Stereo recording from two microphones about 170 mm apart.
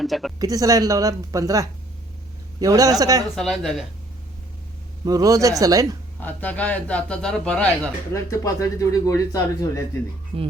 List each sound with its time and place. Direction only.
0.0 s speech: centre (ahead or behind)
0.3 s a woman's voice: 20° right (ahead or behind)
3.3 s speech: centre (ahead or behind)
5.0 s a woman's voice: 20° right (ahead or behind)
6.1 s speech: 10° left (ahead or behind)
8.1 s speech: 20° left (ahead or behind)
10.3 s speech: 35° right (ahead or behind)